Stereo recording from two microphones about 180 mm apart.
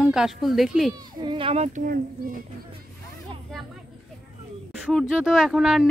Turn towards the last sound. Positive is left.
turn(degrees=0)  # may be behind; listen again after turning